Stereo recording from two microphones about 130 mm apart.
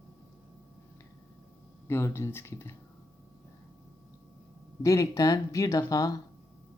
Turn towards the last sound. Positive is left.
turn(degrees=30)  # may be behind; listen again after turning